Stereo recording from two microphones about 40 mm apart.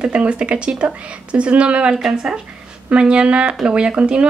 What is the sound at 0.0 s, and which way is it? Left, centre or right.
Speech, right.